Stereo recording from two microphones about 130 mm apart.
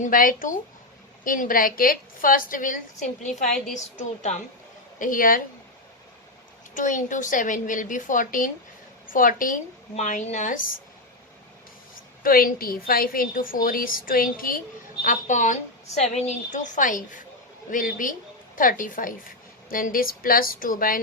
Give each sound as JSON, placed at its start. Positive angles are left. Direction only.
{"t": 0.0, "sound": "a woman's voice", "side_deg": 90}
{"t": 4.9, "sound": "a woman's voice", "side_deg": 90}
{"t": 6.7, "sound": "a woman's voice", "side_deg": 85}
{"t": 9.9, "sound": "a woman's voice", "side_deg": 65}
{"t": 12.2, "sound": "a woman's voice", "side_deg": 90}
{"t": 15.0, "sound": "a woman's voice", "side_deg": 75}
{"t": 16.0, "sound": "a woman's voice", "side_deg": 60}